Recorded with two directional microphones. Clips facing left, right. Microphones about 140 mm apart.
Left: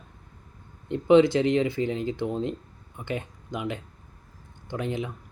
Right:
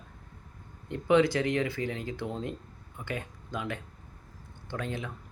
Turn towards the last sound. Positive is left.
turn(degrees=20)  # may be behind; listen again after turning